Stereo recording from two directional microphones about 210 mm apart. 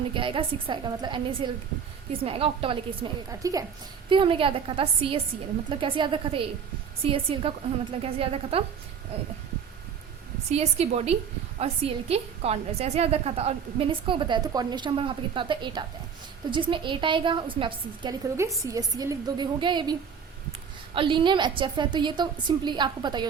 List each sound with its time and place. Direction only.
0.1 s a woman's voice: 25° right (ahead or behind)
10.5 s a woman's voice: 30° right (ahead or behind)